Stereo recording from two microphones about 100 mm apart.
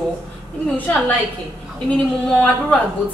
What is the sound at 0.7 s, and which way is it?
Speech, 15° left (ahead or behind).